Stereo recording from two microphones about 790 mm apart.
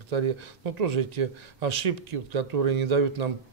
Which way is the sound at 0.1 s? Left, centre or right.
Right.